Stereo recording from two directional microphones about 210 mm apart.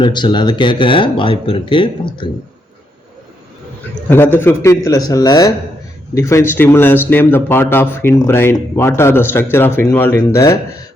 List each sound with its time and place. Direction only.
0.0 s speech: 20° left (ahead or behind)
4.1 s speech: 10° left (ahead or behind)